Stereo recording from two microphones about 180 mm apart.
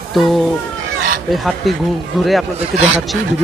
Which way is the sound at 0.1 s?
Centre (ahead or behind).